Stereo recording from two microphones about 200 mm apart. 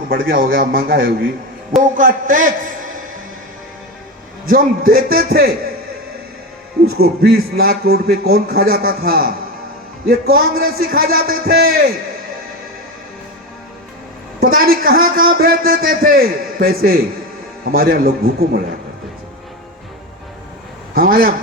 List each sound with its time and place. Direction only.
0.1 s a man's voice: 45° right (ahead or behind)
4.4 s a man's voice: 45° right (ahead or behind)
6.8 s a man's voice: 50° right (ahead or behind)
14.4 s a man's voice: 45° right (ahead or behind)
20.9 s a man's voice: 45° right (ahead or behind)